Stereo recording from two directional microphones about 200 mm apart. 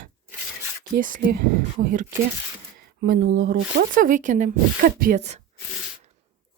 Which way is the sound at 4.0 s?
40° right (ahead or behind).